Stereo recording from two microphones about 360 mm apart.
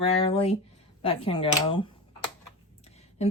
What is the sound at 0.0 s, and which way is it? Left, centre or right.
Speech, centre.